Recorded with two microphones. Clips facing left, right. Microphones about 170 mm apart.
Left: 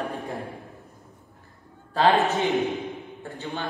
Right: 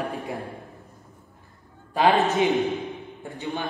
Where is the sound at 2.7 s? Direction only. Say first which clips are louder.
Right 1 dB; 20° right (ahead or behind).